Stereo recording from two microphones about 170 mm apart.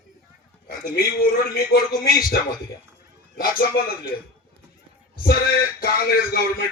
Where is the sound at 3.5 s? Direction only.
60° left (ahead or behind).